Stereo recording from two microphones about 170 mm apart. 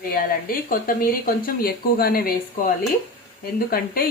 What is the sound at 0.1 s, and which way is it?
Speech, 55° left (ahead or behind).